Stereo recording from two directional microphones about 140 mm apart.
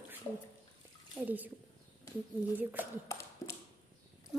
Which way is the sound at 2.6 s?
10° right (ahead or behind).